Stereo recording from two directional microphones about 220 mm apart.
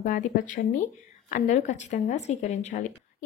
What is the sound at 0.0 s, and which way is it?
Speech, 35° left (ahead or behind).